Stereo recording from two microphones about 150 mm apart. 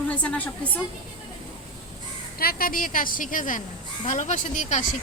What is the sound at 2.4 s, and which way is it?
A woman's voice, 85° left.